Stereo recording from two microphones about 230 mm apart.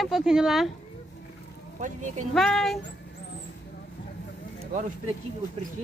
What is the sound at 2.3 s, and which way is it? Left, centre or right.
Speech, centre.